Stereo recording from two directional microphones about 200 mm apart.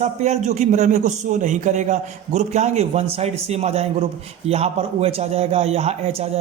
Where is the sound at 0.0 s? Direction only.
35° right (ahead or behind).